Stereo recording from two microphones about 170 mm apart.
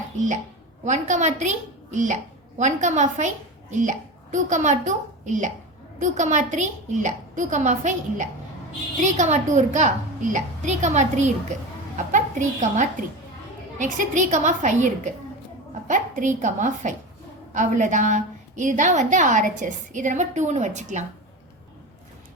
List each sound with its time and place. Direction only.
0.9 s a woman's voice: 45° right (ahead or behind)